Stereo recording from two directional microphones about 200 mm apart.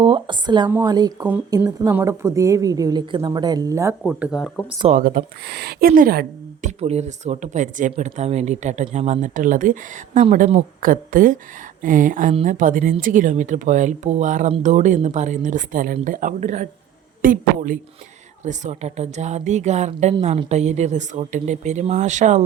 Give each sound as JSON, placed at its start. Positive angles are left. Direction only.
{"t": 0.0, "sound": "a woman's voice", "side_deg": -25}
{"t": 4.0, "sound": "speech", "side_deg": -5}
{"t": 4.9, "sound": "speech", "side_deg": -45}